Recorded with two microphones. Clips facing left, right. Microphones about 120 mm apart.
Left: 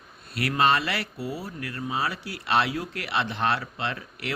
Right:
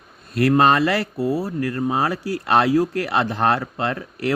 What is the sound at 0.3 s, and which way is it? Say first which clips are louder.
A man's voice: right 7 dB; 45° right (ahead or behind).